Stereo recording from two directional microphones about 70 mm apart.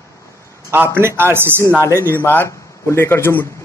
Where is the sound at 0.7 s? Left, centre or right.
Right.